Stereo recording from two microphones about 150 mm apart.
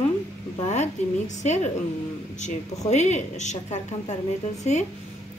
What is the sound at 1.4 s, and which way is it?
A woman's voice, 50° left (ahead or behind).